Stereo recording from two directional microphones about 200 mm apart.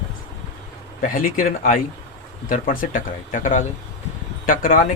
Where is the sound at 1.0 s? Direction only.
45° left (ahead or behind).